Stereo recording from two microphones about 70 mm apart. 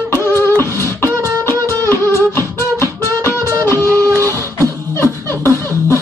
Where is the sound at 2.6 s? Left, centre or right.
Left.